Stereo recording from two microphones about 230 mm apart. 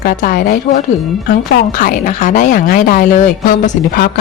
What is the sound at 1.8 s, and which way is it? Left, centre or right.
Speech, left.